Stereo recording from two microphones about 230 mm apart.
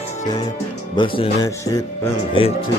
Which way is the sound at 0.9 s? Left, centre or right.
Left.